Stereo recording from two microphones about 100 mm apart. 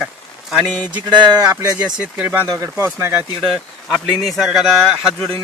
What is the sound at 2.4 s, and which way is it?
Speech, 35° right (ahead or behind).